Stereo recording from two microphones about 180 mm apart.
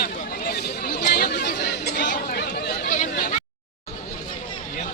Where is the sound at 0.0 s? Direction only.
60° left (ahead or behind).